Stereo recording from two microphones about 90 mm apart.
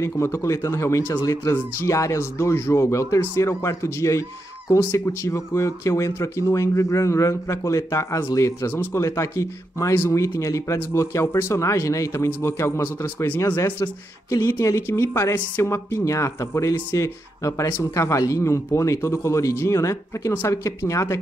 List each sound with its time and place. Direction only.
0.0 s a man's voice: 30° left (ahead or behind)